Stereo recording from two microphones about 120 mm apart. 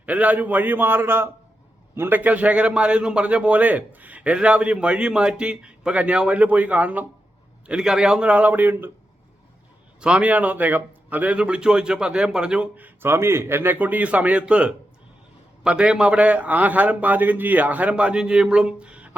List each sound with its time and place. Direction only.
0.0 s a man's voice: 15° right (ahead or behind)
10.0 s a man's voice: 10° right (ahead or behind)